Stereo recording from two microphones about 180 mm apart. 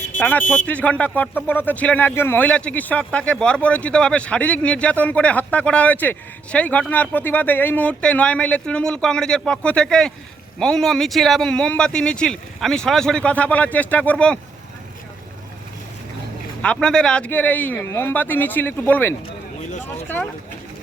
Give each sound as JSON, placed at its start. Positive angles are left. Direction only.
{"t": 0.2, "sound": "speech", "side_deg": 10}
{"t": 16.6, "sound": "speech", "side_deg": 5}